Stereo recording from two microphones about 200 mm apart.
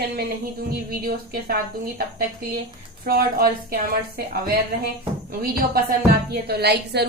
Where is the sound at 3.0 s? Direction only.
50° right (ahead or behind).